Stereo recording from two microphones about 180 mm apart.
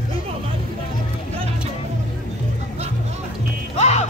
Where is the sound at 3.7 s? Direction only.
40° left (ahead or behind).